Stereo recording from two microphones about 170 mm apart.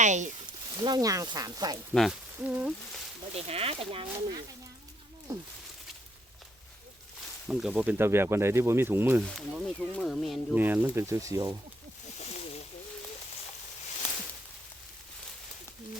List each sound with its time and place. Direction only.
0.0 s speech: 45° right (ahead or behind)
0.8 s speech: 25° right (ahead or behind)
1.9 s speech: centre (ahead or behind)
3.3 s speech: 35° right (ahead or behind)
7.4 s speech: centre (ahead or behind)
10.6 s speech: 10° right (ahead or behind)